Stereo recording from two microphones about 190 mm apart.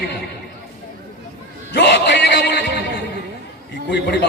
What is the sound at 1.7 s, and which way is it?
Music, 60° left (ahead or behind).